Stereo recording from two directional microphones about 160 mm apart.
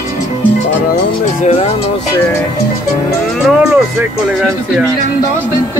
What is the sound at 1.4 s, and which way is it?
Music, 40° left (ahead or behind).